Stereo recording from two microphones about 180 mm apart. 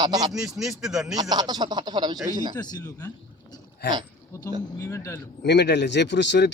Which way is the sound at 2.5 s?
20° left (ahead or behind).